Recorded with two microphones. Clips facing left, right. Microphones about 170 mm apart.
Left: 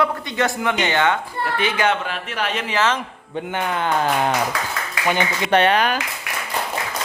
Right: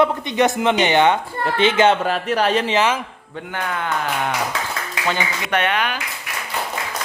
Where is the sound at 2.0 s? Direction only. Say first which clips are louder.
Right 7 dB; 40° right (ahead or behind).